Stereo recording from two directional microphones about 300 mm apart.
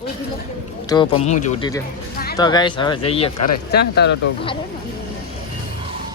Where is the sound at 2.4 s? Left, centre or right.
Centre.